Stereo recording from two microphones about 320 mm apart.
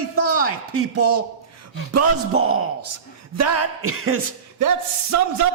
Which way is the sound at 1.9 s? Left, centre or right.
Right.